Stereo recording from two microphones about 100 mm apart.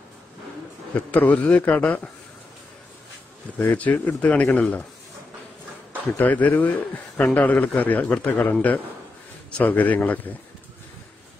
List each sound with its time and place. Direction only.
0.9 s a man's voice: 15° left (ahead or behind)
3.5 s a man's voice: 15° left (ahead or behind)
6.1 s a man's voice: 15° left (ahead or behind)